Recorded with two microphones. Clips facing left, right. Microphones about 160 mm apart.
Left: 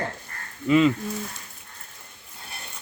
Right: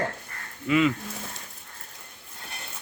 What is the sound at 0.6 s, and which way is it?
Speech, 30° left (ahead or behind).